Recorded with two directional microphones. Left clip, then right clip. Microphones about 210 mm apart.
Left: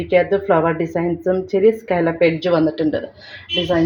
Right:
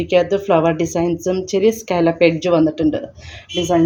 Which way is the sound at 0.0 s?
20° right (ahead or behind).